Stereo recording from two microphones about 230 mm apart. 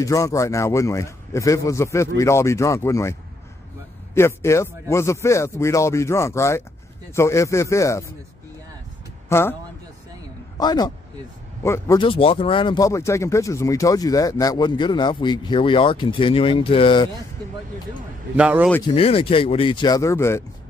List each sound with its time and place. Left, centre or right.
0.0 s speech: centre
9.3 s speech: centre
10.6 s speech: centre
18.3 s speech: centre
18.9 s speech: left